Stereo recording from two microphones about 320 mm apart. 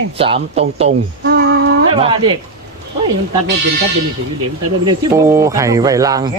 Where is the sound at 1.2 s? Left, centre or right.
Right.